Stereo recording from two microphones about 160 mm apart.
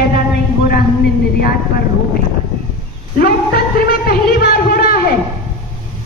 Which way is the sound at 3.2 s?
70° left (ahead or behind).